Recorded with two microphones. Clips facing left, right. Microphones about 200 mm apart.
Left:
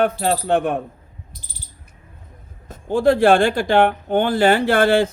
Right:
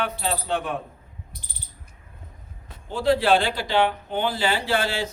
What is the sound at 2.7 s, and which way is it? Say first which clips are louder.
Speech: left 6 dB; 50° left (ahead or behind).